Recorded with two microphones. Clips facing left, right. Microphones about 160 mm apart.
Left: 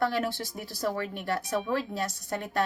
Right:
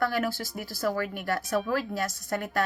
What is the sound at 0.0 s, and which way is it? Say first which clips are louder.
A woman's voice: even; 30° left (ahead or behind).